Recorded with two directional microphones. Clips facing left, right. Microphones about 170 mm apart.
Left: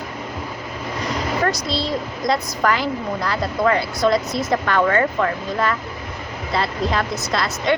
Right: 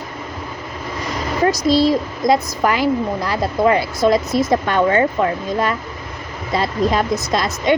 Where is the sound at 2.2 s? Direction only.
15° right (ahead or behind).